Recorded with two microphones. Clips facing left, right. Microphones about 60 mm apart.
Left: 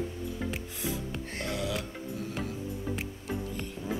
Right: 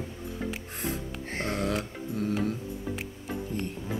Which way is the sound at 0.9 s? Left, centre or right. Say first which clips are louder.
Right 1 dB; right.